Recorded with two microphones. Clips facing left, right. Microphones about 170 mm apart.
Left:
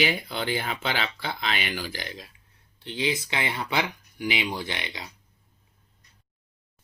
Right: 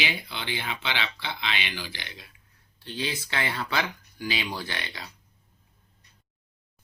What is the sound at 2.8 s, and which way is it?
Speech, 20° left (ahead or behind).